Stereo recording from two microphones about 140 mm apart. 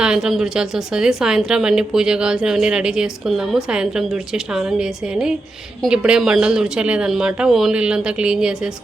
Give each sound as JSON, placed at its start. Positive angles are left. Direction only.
{"t": 0.0, "sound": "a woman's voice", "side_deg": -5}